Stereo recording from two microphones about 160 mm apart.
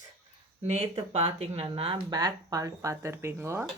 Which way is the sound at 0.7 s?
40° right (ahead or behind).